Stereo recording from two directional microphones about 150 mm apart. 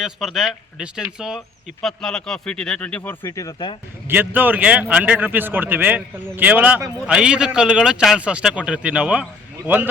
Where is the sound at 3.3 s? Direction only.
25° left (ahead or behind).